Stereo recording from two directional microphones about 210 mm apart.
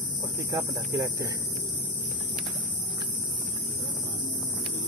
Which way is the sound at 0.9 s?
15° right (ahead or behind).